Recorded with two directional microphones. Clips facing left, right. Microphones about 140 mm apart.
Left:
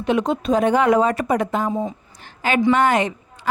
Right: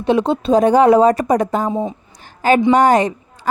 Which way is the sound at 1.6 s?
20° right (ahead or behind).